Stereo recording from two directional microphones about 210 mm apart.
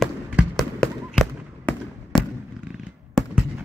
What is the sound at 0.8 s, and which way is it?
Fireworks, centre (ahead or behind).